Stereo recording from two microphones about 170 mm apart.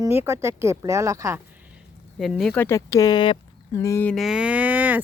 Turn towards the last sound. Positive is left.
turn(degrees=-10)  # may be behind; listen again after turning